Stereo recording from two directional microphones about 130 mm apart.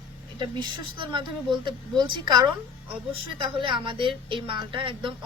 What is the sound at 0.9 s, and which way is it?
Speech, 40° right (ahead or behind).